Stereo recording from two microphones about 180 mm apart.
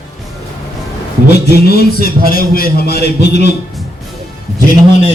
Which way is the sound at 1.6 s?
60° left (ahead or behind).